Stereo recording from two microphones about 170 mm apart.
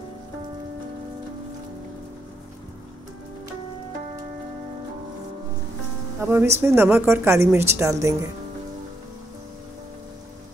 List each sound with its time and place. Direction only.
6.2 s a woman's voice: 15° right (ahead or behind)